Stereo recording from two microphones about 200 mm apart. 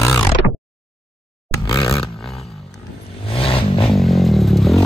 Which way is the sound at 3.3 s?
25° left (ahead or behind).